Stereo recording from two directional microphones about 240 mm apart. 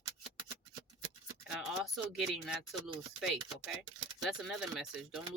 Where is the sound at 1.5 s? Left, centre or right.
Centre.